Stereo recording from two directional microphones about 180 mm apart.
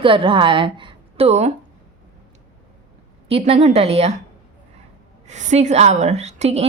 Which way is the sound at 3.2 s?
35° right (ahead or behind).